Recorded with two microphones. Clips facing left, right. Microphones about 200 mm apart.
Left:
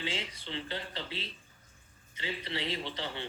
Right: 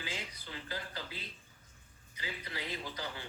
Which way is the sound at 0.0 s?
25° left (ahead or behind).